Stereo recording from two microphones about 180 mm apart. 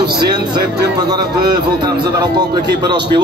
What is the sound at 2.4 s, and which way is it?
Music, 25° right (ahead or behind).